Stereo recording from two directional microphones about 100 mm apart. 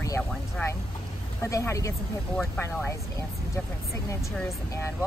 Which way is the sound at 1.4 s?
30° left (ahead or behind).